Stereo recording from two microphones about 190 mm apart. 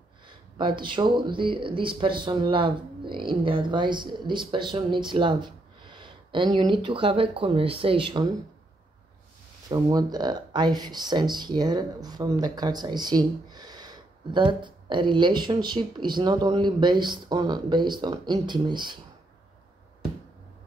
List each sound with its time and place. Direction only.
0.6 s speech: 25° right (ahead or behind)
9.7 s speech: 20° right (ahead or behind)